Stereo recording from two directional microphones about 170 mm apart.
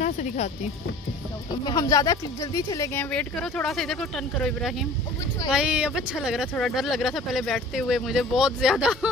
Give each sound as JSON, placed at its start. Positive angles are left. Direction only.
{"t": 0.0, "sound": "music", "side_deg": 45}
{"t": 1.6, "sound": "speech", "side_deg": 20}